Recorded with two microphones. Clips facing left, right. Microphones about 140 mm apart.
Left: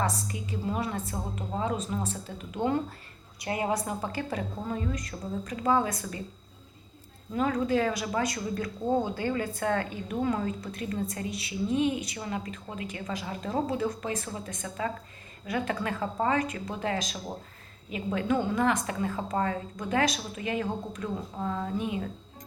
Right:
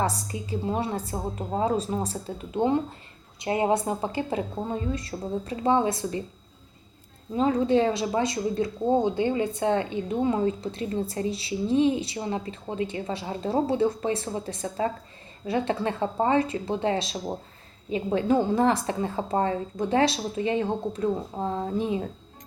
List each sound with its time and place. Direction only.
0.0 s a woman's voice: 30° right (ahead or behind)
2.6 s a woman's voice: 20° right (ahead or behind)
7.3 s a woman's voice: 25° right (ahead or behind)